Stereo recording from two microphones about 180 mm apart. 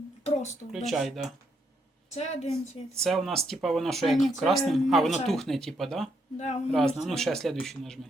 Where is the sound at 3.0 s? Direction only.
Centre (ahead or behind).